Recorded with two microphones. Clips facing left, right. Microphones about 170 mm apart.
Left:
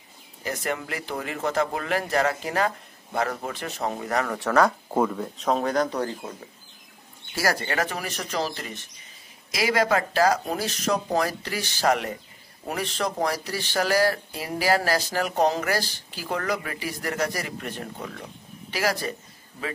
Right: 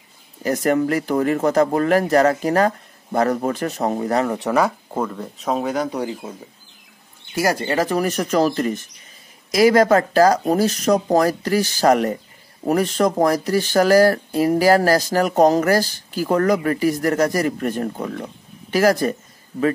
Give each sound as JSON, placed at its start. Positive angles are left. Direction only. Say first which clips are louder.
{"t": 0.4, "sound": "speech", "louder": "right 11 dB", "side_deg": -40}
{"t": 4.9, "sound": "speech", "louder": "left 1 dB", "side_deg": 5}
{"t": 7.3, "sound": "speech", "louder": "right 6 dB", "side_deg": -20}
{"t": 7.7, "sound": "speech", "louder": "right 9 dB", "side_deg": -35}